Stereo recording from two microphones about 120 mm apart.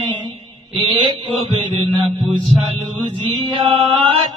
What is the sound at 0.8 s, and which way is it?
Mantra, 40° right (ahead or behind).